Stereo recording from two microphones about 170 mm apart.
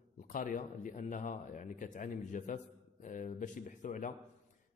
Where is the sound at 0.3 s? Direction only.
50° left (ahead or behind).